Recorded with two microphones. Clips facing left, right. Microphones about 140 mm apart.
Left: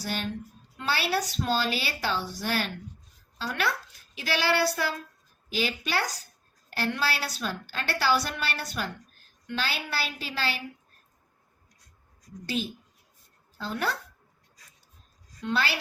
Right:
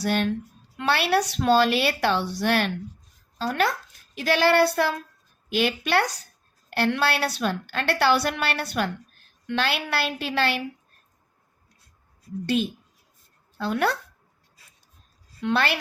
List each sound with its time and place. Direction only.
0.0 s a woman's voice: 60° right (ahead or behind)
3.3 s a child's voice: 45° right (ahead or behind); by 10.6 s 60° right (ahead or behind)
13.6 s speech: 70° right (ahead or behind)
15.4 s a woman's voice: 65° right (ahead or behind)